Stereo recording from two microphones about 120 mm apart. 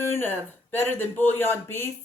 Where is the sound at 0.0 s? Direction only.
20° left (ahead or behind).